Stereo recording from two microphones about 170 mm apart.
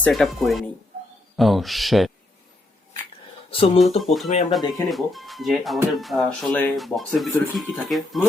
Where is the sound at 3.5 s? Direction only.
35° left (ahead or behind).